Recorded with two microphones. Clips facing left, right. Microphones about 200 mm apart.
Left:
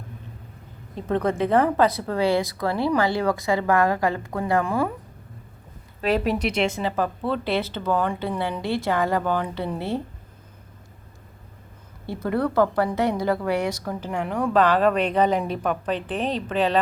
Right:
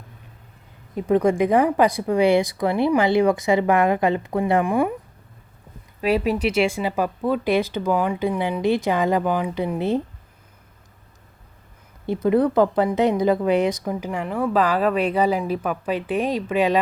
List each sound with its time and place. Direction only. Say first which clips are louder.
0.9 s a woman's voice: right 5 dB; 10° right (ahead or behind)
6.0 s a woman's voice: right 2 dB; 10° right (ahead or behind)
12.0 s a woman's voice: right 6 dB; 20° right (ahead or behind)
14.1 s a woman's voice: left 1 dB; centre (ahead or behind)